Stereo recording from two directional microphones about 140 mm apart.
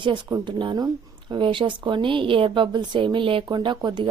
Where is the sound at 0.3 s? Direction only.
30° right (ahead or behind).